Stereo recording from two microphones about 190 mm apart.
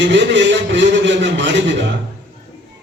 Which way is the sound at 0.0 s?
70° right (ahead or behind).